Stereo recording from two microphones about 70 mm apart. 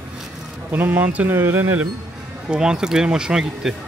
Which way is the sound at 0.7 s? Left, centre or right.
Right.